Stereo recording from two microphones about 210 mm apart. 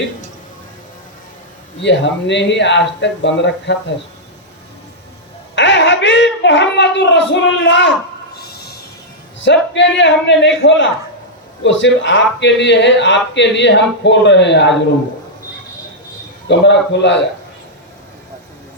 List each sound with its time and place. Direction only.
1.8 s a man's voice: 60° left (ahead or behind)
5.5 s a woman's voice: 60° left (ahead or behind)
8.4 s music: 50° left (ahead or behind)
9.4 s a man's voice: 60° left (ahead or behind)
16.5 s a man's voice: 55° left (ahead or behind)